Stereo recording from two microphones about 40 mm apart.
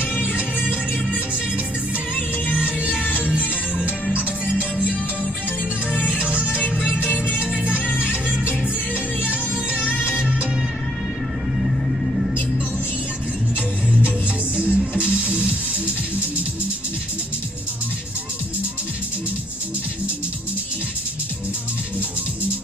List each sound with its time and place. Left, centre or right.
0.2 s music: right
2.5 s music: right
6.1 s music: right
7.3 s music: right
14.6 s music: right